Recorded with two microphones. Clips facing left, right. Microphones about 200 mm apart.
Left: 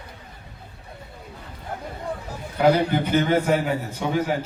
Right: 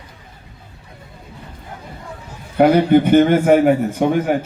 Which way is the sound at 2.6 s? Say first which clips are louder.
Right 7 dB; 60° right (ahead or behind).